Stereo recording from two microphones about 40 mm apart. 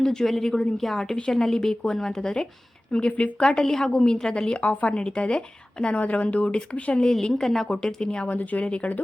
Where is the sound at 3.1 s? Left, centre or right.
Left.